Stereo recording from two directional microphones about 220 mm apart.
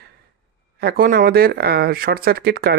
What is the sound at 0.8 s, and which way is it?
Speech, 45° right (ahead or behind).